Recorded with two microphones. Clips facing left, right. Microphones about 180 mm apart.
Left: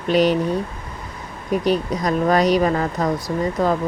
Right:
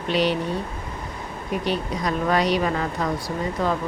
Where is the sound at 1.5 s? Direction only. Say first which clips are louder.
Left 6 dB; 45° left (ahead or behind).